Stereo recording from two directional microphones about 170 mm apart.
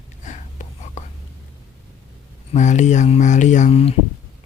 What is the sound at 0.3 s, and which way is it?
Whispering, 45° left (ahead or behind).